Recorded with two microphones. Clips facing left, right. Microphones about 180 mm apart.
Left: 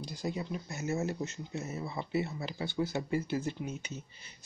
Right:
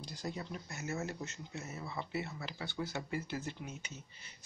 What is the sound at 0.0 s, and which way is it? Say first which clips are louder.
Speech: left 6 dB; 15° left (ahead or behind).